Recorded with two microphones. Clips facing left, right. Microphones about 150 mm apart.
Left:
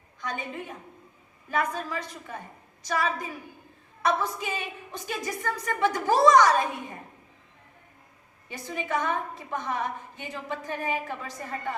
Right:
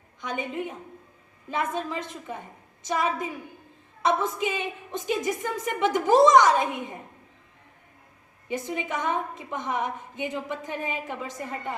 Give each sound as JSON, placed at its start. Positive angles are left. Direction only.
{"t": 0.2, "sound": "a woman's voice", "side_deg": -20}
{"t": 8.4, "sound": "a woman's voice", "side_deg": -20}